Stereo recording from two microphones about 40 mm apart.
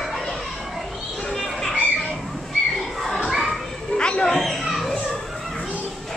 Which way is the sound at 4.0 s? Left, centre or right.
Left.